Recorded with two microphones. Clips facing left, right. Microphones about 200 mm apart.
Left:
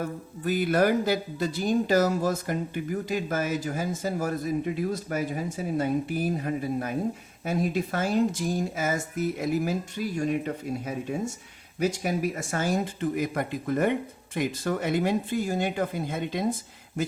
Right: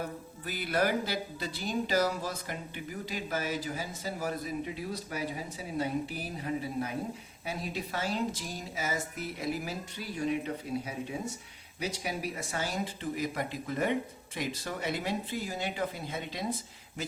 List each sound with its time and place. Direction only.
0.0 s speech: 50° left (ahead or behind)